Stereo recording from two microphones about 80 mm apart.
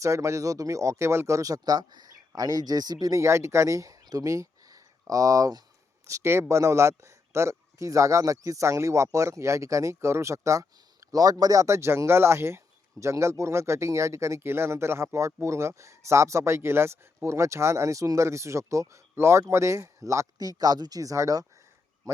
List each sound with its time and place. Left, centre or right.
0.0 s speech: right